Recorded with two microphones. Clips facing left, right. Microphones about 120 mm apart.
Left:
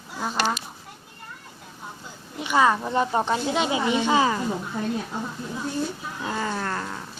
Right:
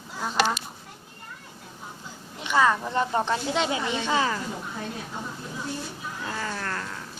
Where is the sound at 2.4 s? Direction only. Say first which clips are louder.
Left 2 dB; 15° left (ahead or behind).